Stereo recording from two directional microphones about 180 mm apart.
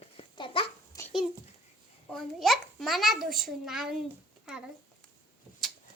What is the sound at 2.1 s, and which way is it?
A child's voice, centre (ahead or behind).